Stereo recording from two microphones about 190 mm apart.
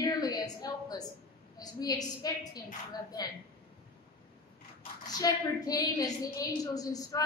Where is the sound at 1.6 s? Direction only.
20° left (ahead or behind).